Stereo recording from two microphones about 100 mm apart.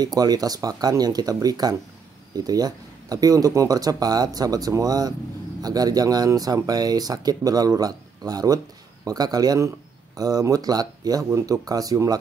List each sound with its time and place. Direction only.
0.0 s speech: 40° right (ahead or behind)